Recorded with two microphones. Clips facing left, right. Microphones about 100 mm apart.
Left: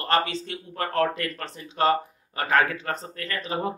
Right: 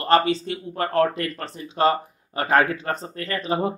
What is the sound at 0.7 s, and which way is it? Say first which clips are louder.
Speech: right 3 dB; 25° right (ahead or behind).